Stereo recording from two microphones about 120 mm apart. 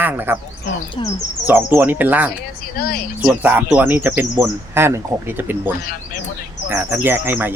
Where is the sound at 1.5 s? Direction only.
15° right (ahead or behind).